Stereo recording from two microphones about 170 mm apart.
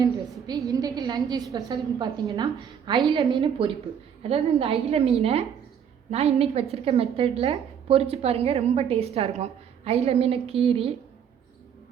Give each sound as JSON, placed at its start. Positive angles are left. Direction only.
{"t": 0.0, "sound": "a woman's voice", "side_deg": -20}